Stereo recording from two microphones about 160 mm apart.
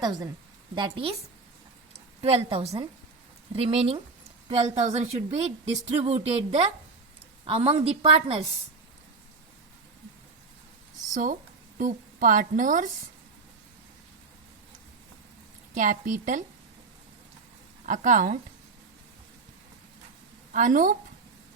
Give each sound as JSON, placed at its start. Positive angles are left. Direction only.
{"t": 0.0, "sound": "a woman's voice", "side_deg": -25}
{"t": 2.2, "sound": "a woman's voice", "side_deg": -35}
{"t": 11.1, "sound": "a woman's voice", "side_deg": -55}
{"t": 15.7, "sound": "a woman's voice", "side_deg": -55}
{"t": 17.8, "sound": "a woman's voice", "side_deg": -50}
{"t": 20.5, "sound": "a woman's voice", "side_deg": -55}